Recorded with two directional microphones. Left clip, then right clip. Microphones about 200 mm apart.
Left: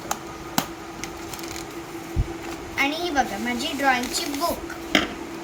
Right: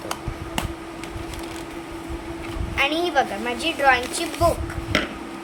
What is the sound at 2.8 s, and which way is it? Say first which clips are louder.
A woman's voice: right 3 dB; 55° right (ahead or behind).